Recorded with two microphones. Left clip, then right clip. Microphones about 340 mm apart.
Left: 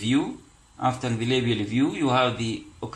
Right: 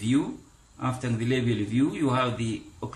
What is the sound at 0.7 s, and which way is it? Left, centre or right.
Speech, centre.